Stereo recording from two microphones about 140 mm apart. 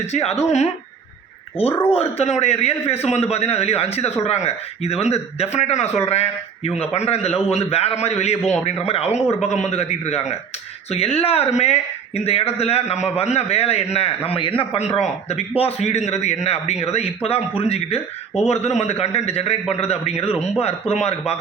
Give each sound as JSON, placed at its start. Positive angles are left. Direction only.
{"t": 0.0, "sound": "a man's voice", "side_deg": 50}
{"t": 1.9, "sound": "a man's voice", "side_deg": 45}